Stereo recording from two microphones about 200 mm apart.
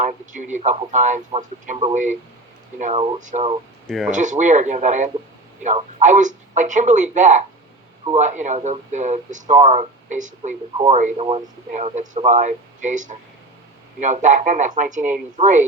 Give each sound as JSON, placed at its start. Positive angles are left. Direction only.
{"t": 0.0, "sound": "speech", "side_deg": -40}
{"t": 3.8, "sound": "speech", "side_deg": 0}
{"t": 4.1, "sound": "speech", "side_deg": -40}